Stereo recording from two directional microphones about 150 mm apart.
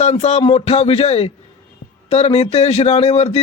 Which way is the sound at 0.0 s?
45° left (ahead or behind).